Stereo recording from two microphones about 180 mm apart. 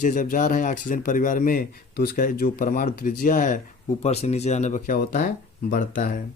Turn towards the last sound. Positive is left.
turn(degrees=50)  # may be behind; listen again after turning